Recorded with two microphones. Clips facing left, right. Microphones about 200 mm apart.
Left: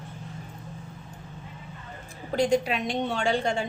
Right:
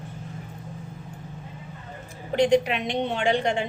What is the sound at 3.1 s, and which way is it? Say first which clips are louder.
Speech: right 3 dB; 20° right (ahead or behind).